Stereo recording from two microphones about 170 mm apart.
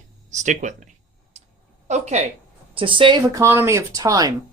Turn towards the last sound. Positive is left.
turn(degrees=-20)  # may be behind; listen again after turning